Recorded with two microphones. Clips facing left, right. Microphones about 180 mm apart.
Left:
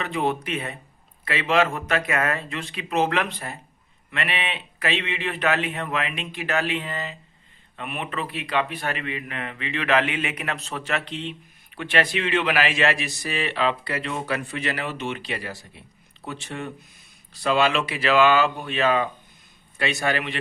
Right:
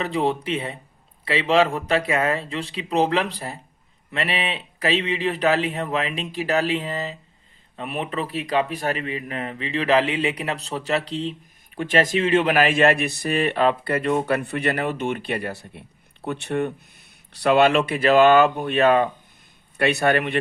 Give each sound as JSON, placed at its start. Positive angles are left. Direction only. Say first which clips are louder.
{"t": 0.0, "sound": "a man's voice", "louder": "right 3 dB", "side_deg": -30}